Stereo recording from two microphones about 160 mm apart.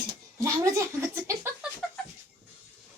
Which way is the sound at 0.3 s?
20° right (ahead or behind).